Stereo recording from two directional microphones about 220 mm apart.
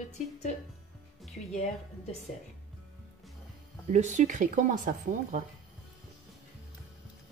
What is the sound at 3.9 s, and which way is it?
Speech, 30° right (ahead or behind).